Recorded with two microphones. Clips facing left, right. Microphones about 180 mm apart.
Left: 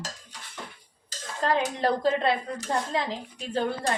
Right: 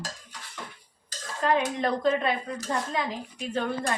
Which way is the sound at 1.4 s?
35° left (ahead or behind).